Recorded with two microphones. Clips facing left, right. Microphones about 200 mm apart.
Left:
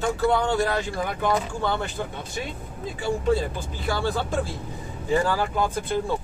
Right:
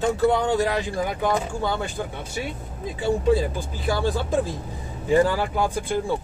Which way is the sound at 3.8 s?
15° right (ahead or behind).